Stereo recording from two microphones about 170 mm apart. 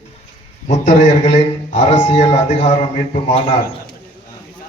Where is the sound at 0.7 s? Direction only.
45° left (ahead or behind).